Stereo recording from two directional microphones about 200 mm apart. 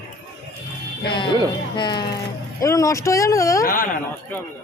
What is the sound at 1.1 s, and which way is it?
A woman's voice, 25° left (ahead or behind).